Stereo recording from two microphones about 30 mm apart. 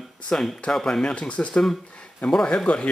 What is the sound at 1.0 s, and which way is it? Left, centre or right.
Speech, left.